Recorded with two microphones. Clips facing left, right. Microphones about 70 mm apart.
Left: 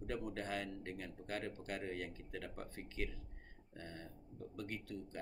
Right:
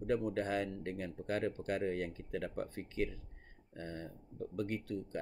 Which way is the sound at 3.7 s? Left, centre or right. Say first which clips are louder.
Right 7 dB; right.